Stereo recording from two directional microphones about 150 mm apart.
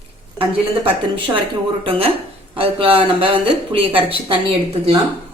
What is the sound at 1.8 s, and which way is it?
Speech, 40° right (ahead or behind).